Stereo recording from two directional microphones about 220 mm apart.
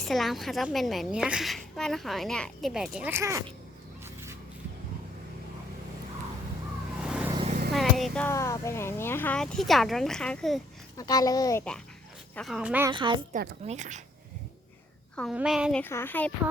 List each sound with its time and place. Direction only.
0.0 s a woman's voice: centre (ahead or behind)
4.0 s a sound: 10° right (ahead or behind)
7.0 s vehicle: 5° right (ahead or behind)
7.4 s vehicle: 35° right (ahead or behind)
7.7 s a woman's voice: centre (ahead or behind)
10.9 s a child's voice: 15° left (ahead or behind)
12.4 s a woman's voice: centre (ahead or behind)
12.9 s a woman's voice: 20° right (ahead or behind)
13.7 s speech: 35° right (ahead or behind)
15.1 s a woman's voice: 5° left (ahead or behind)
15.8 s a child's voice: 10° left (ahead or behind)